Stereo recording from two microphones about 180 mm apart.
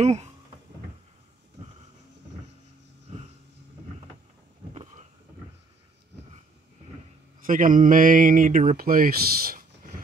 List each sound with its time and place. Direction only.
0.0 s speech: 40° right (ahead or behind)
7.4 s speech: 50° right (ahead or behind)